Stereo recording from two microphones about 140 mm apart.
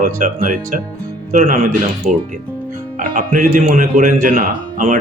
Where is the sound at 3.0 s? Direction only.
80° right.